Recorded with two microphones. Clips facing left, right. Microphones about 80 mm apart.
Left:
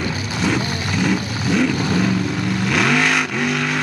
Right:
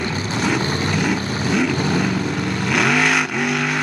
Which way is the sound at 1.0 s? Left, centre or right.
Centre.